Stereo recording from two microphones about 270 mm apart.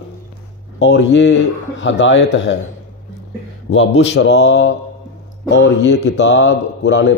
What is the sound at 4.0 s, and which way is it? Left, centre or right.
Speech, left.